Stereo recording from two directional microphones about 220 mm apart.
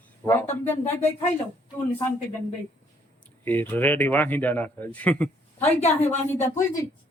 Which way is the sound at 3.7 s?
10° left (ahead or behind).